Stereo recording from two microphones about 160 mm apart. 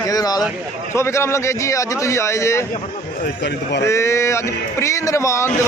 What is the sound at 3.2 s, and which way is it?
Speech, 90° left.